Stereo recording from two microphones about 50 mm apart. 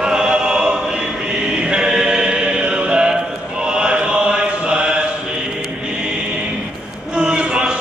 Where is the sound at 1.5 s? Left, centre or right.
Centre.